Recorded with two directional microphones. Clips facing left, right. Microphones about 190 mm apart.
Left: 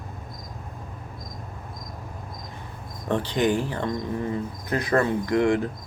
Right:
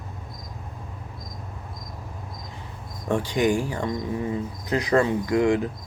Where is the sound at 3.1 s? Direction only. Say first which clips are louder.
Right 1 dB; 10° right (ahead or behind).